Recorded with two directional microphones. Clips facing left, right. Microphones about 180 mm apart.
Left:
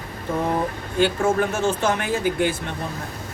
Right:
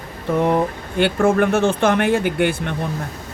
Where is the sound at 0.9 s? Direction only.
60° right (ahead or behind).